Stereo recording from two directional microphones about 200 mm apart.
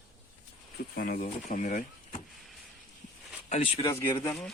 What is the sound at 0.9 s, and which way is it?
Speech, 45° left (ahead or behind).